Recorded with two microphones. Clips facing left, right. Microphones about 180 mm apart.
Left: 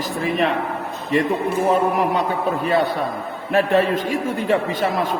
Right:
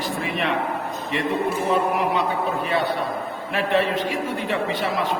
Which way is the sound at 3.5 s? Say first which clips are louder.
Left 5 dB; 45° left (ahead or behind).